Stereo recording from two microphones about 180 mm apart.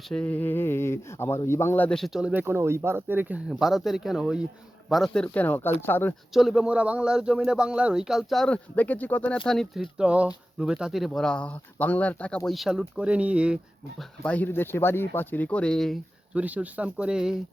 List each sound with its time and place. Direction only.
0.1 s speech: 5° left (ahead or behind)
6.3 s speech: centre (ahead or behind)
14.2 s speech: 10° left (ahead or behind)